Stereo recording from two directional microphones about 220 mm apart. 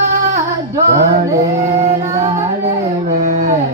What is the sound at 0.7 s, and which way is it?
Music, 15° right (ahead or behind).